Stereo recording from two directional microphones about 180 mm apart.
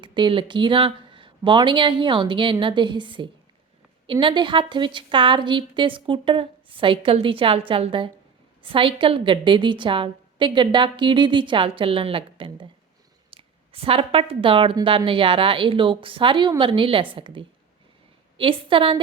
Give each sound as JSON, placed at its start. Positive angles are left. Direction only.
{"t": 0.0, "sound": "a woman's voice", "side_deg": -25}